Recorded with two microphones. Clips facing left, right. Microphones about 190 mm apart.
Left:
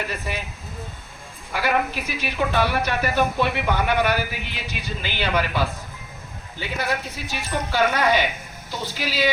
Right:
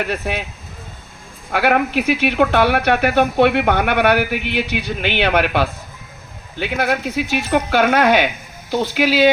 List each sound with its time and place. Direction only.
0.0 s speech: 65° right (ahead or behind)
1.5 s speech: 65° right (ahead or behind)